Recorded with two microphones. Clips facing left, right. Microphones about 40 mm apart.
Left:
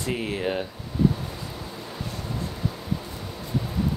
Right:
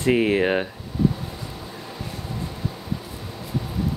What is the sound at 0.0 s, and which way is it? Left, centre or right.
Speech, right.